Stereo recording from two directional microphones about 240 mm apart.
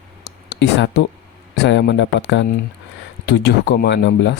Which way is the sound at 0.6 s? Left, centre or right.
Left.